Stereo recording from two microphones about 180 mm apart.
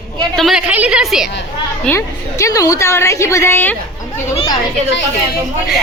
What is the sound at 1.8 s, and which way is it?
A woman's voice, 15° left (ahead or behind).